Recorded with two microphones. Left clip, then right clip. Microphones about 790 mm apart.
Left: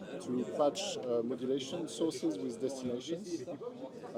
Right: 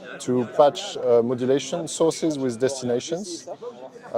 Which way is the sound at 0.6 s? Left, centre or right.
Right.